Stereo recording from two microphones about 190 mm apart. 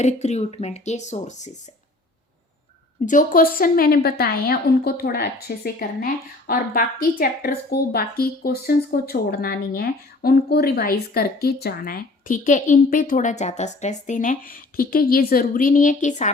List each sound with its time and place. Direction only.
0.0 s speech: 35° left (ahead or behind)
3.1 s a woman's voice: 45° left (ahead or behind)